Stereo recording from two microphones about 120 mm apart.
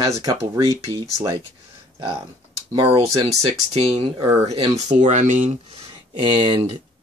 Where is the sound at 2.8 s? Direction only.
50° right (ahead or behind).